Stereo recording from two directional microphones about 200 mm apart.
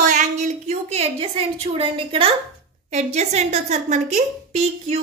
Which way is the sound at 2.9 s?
35° right (ahead or behind).